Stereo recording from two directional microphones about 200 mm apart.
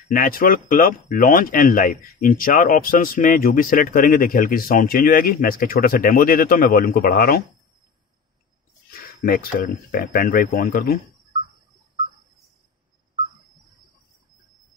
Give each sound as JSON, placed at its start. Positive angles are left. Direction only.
{"t": 0.1, "sound": "speech", "side_deg": 45}
{"t": 9.0, "sound": "speech", "side_deg": 50}